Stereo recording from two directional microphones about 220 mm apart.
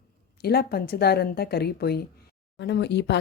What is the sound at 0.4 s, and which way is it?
Speech, 45° left (ahead or behind).